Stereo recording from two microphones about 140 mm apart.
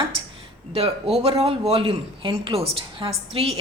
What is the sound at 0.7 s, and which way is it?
A woman's voice, 40° right (ahead or behind).